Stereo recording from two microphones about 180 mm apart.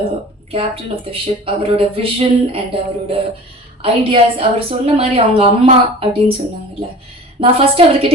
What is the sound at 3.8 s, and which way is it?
A woman's voice, 30° right (ahead or behind).